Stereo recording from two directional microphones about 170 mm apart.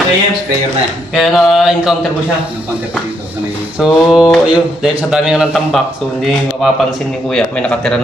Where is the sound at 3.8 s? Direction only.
Centre (ahead or behind).